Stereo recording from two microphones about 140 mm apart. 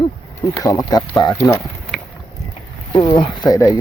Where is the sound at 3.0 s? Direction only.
30° left (ahead or behind).